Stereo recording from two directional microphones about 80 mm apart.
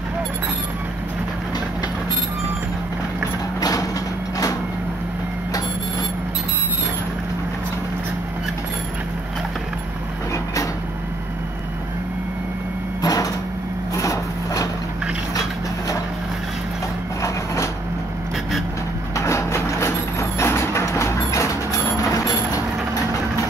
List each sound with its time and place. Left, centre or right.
13.0 s a sound: left
13.9 s vehicle: left
19.1 s vehicle: left